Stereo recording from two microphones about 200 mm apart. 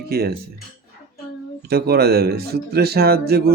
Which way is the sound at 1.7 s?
50° right (ahead or behind).